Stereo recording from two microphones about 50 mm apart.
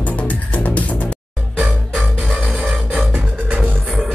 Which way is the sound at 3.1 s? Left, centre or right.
Right.